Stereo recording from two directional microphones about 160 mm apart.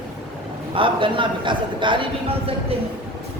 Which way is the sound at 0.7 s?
30° right (ahead or behind).